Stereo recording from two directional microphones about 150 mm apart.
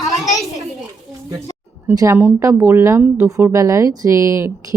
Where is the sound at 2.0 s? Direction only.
15° right (ahead or behind).